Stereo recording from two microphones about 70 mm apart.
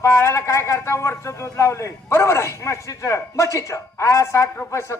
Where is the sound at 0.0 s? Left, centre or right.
Left.